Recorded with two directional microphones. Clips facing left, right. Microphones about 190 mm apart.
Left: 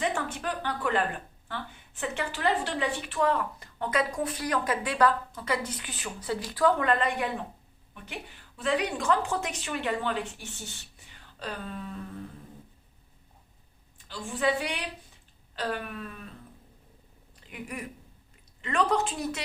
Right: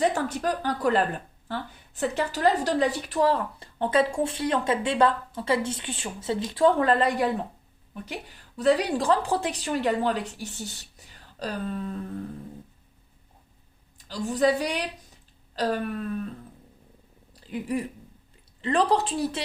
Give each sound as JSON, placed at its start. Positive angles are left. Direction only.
{"t": 0.0, "sound": "a woman's voice", "side_deg": -40}
{"t": 14.1, "sound": "a woman's voice", "side_deg": -40}
{"t": 17.3, "sound": "a woman's voice", "side_deg": -30}